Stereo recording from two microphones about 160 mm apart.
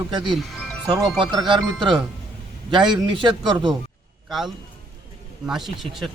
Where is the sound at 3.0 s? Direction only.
30° right (ahead or behind).